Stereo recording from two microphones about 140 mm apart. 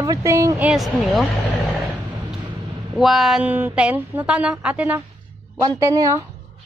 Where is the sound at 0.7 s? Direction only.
Centre (ahead or behind).